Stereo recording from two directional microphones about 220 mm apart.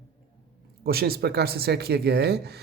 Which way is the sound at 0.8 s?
45° right (ahead or behind).